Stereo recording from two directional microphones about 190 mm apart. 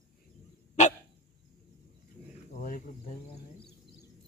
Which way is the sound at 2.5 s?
45° left (ahead or behind).